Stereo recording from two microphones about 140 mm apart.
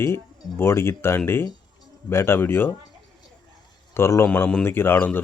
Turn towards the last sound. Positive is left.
turn(degrees=10)  # may be behind; listen again after turning